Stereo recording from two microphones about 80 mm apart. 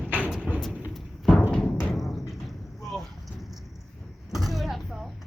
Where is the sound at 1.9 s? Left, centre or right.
Centre.